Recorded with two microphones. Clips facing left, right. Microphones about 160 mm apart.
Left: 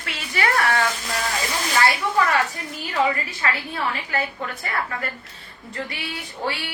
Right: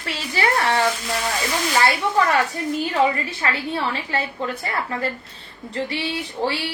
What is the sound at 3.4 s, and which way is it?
A woman's voice, 30° right (ahead or behind).